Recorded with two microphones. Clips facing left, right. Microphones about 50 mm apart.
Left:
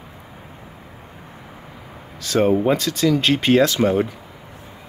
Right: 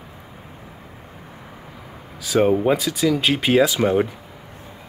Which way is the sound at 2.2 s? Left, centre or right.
Centre.